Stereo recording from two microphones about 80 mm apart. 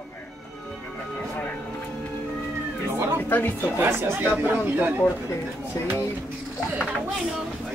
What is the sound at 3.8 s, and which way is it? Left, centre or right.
Speech, right.